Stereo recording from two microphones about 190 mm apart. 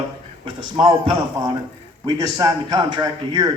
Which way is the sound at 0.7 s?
25° right (ahead or behind).